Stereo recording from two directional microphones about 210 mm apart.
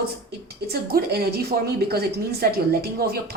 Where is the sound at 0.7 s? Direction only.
50° right (ahead or behind).